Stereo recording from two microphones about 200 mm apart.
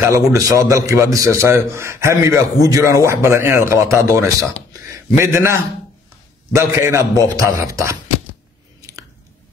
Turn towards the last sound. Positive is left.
turn(degrees=-15)  # may be behind; listen again after turning